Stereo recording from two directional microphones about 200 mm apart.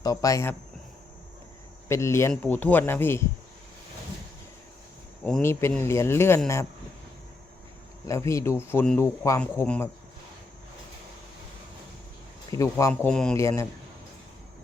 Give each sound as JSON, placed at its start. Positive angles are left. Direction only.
{"t": 0.0, "sound": "speech", "side_deg": 20}
{"t": 1.9, "sound": "speech", "side_deg": 15}
{"t": 5.2, "sound": "speech", "side_deg": 10}
{"t": 8.0, "sound": "speech", "side_deg": 15}
{"t": 12.5, "sound": "speech", "side_deg": 15}